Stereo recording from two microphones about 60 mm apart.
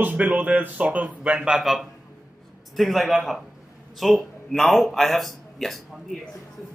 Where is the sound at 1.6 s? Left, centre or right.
Centre.